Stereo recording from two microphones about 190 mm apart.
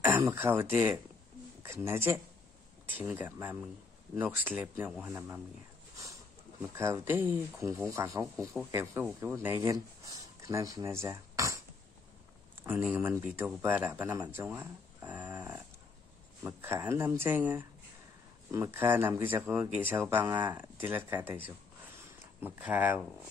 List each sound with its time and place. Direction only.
0.0 s speech: 15° right (ahead or behind)
6.8 s speech: 15° right (ahead or behind)
12.6 s speech: 10° right (ahead or behind)
14.3 s a sound: 10° right (ahead or behind)
16.4 s speech: 10° right (ahead or behind)
22.4 s speech: 10° right (ahead or behind)